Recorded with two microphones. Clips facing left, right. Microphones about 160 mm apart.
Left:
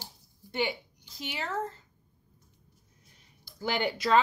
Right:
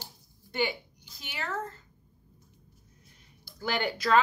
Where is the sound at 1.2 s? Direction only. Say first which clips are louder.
Left 3 dB; 25° left (ahead or behind).